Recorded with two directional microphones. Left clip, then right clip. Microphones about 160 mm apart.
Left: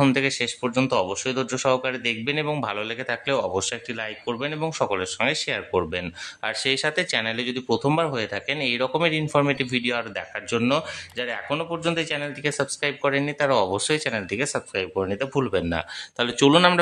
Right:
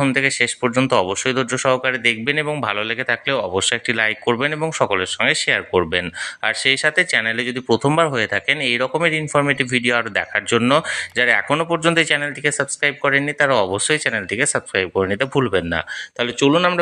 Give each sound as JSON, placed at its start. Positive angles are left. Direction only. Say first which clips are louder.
{"t": 0.0, "sound": "speech", "louder": "right 4 dB", "side_deg": 0}
{"t": 0.6, "sound": "speech", "louder": "right 6 dB", "side_deg": -20}
{"t": 3.6, "sound": "speech", "louder": "right 11 dB", "side_deg": -25}
{"t": 7.6, "sound": "speech", "louder": "right 6 dB", "side_deg": -20}
{"t": 12.2, "sound": "speech", "louder": "right 6 dB", "side_deg": -10}
{"t": 16.3, "sound": "speech", "louder": "right 1 dB", "side_deg": 0}